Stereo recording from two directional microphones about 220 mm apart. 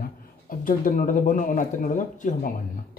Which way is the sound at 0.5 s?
40° left (ahead or behind).